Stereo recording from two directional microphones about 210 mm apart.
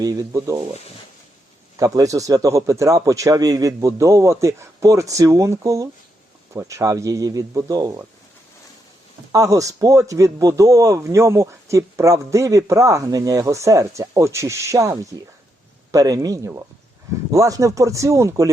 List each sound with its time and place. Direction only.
0.0 s speech: 15° right (ahead or behind)
1.7 s speech: 15° right (ahead or behind)
9.3 s speech: 15° right (ahead or behind)